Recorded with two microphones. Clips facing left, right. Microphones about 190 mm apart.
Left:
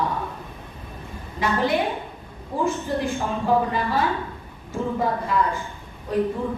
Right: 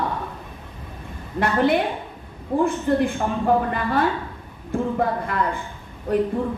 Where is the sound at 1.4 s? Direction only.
60° right (ahead or behind).